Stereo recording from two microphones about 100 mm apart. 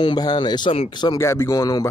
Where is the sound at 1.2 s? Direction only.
30° left (ahead or behind).